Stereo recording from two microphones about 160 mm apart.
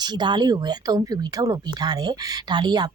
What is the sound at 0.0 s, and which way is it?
Speech, 30° right (ahead or behind).